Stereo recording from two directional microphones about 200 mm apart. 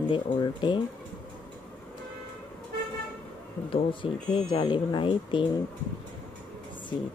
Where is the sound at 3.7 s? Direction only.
25° left (ahead or behind).